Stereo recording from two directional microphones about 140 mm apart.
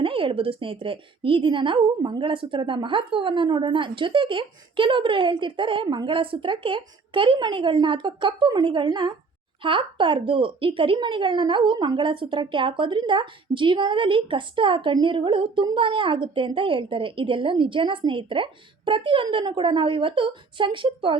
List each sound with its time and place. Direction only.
0.0 s a woman's voice: 40° right (ahead or behind)